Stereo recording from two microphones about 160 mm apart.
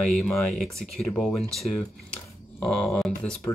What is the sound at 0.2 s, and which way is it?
Speech, centre (ahead or behind).